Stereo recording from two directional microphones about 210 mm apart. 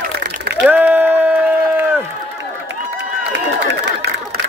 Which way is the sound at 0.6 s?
10° right (ahead or behind).